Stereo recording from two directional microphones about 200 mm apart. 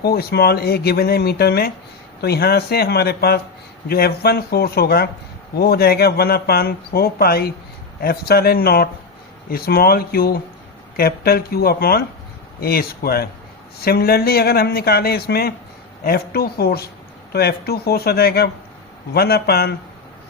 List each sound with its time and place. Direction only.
0.0 s a man's voice: 50° left (ahead or behind)